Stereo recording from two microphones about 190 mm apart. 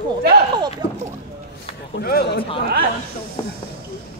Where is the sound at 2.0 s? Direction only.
55° left (ahead or behind).